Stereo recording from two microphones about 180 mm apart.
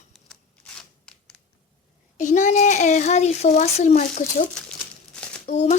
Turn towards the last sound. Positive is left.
turn(degrees=35)  # may be behind; listen again after turning